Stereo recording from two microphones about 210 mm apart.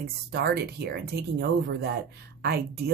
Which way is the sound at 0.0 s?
50° right (ahead or behind).